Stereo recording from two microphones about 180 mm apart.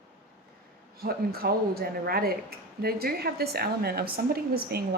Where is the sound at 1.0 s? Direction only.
60° right (ahead or behind).